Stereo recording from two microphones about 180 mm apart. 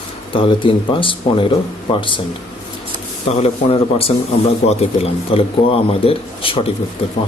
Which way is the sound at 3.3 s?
35° left (ahead or behind).